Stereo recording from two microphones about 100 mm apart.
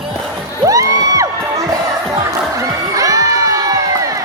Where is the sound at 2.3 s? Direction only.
35° right (ahead or behind).